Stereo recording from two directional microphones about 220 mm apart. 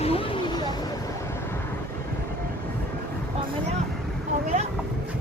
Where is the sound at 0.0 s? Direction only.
25° left (ahead or behind).